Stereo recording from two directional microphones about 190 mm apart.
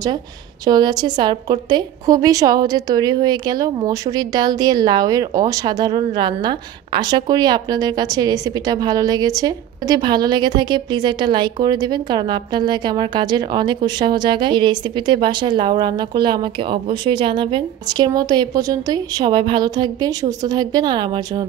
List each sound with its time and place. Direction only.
0.7 s a woman's voice: 20° right (ahead or behind)